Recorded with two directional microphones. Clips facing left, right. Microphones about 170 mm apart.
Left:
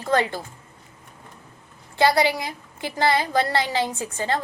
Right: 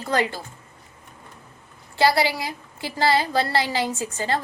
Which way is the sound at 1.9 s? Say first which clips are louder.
Left 1 dB; 20° left (ahead or behind).